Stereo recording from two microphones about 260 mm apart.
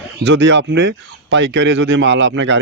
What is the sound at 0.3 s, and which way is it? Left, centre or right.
A man's voice, right.